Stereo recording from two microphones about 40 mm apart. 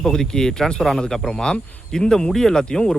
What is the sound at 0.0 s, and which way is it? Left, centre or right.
Speech, centre.